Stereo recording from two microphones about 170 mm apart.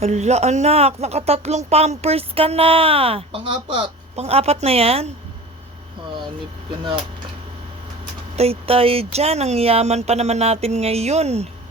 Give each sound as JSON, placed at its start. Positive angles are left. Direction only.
{"t": 0.0, "sound": "speech", "side_deg": -40}
{"t": 8.4, "sound": "speech", "side_deg": -35}